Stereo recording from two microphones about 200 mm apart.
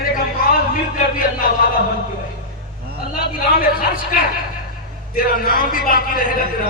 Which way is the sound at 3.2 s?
45° left (ahead or behind).